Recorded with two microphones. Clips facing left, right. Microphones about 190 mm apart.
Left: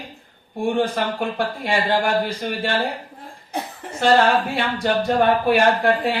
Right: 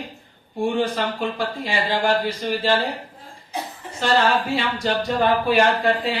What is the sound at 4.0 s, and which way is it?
Speech, 60° left (ahead or behind).